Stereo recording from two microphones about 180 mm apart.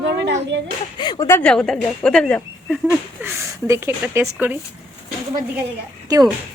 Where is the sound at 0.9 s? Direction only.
25° left (ahead or behind).